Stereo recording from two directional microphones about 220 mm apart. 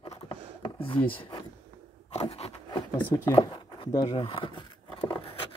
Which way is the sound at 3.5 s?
20° left (ahead or behind).